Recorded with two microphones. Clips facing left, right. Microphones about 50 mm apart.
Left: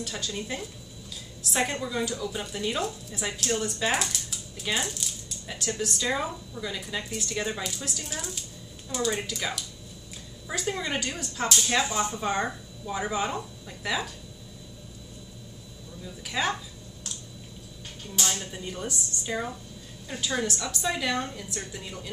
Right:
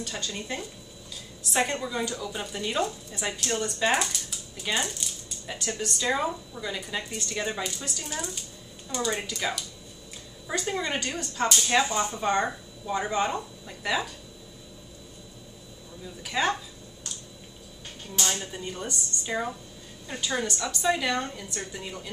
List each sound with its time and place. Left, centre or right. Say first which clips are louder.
0.0 s a woman's voice: left 1 dB; centre
16.3 s a woman's voice: right 2 dB; centre
18.1 s a woman's voice: right 1 dB; centre